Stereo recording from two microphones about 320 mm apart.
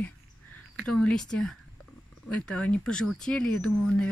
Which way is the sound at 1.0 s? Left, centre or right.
Centre.